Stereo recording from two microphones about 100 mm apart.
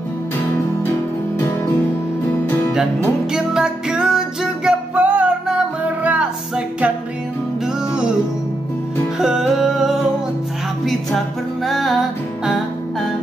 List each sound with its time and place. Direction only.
2.4 s music: 20° left (ahead or behind)
3.3 s music: 5° right (ahead or behind)
9.2 s music: 5° right (ahead or behind)
11.6 s music: centre (ahead or behind)